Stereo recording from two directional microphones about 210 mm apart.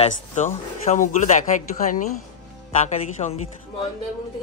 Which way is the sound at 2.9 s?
30° left (ahead or behind).